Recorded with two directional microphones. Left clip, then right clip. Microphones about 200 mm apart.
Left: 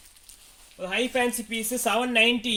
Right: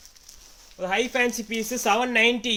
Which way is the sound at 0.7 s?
35° right (ahead or behind).